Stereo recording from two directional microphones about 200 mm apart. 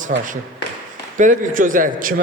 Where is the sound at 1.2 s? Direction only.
40° right (ahead or behind).